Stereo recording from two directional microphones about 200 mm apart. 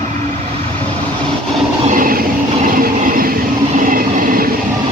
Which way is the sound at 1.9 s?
45° right (ahead or behind).